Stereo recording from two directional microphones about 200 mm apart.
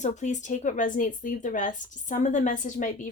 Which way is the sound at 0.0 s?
35° left (ahead or behind).